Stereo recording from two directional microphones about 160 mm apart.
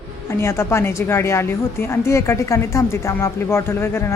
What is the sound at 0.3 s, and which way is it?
A woman's voice, 15° left (ahead or behind).